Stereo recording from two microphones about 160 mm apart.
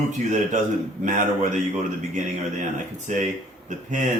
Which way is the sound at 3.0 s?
50° right (ahead or behind).